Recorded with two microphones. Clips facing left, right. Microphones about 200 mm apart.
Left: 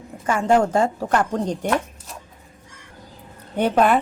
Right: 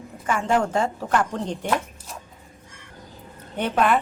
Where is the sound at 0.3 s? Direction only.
40° left (ahead or behind).